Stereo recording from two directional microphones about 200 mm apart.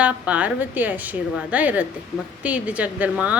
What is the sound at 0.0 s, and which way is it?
A woman's voice, 5° right (ahead or behind).